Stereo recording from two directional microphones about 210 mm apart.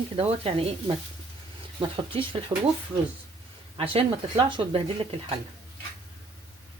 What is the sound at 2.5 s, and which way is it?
Speech, 15° right (ahead or behind).